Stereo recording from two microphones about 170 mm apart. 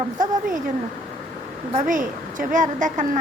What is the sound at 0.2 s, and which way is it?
Speech, 50° right (ahead or behind).